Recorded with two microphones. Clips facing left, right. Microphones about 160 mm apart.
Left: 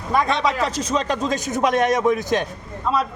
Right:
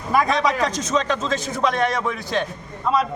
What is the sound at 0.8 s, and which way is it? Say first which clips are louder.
Speech: even; 35° left (ahead or behind).